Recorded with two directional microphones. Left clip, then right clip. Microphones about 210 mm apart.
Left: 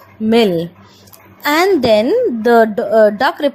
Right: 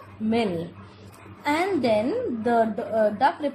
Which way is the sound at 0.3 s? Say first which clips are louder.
Left 13 dB; 35° left (ahead or behind).